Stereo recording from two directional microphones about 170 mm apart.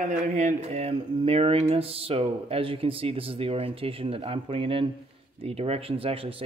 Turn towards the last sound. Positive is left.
turn(degrees=-30)  # may be behind; listen again after turning